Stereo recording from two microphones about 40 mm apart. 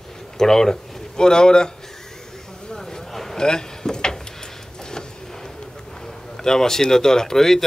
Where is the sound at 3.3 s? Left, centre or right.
Centre.